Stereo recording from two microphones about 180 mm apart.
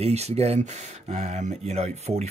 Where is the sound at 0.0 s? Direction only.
35° right (ahead or behind).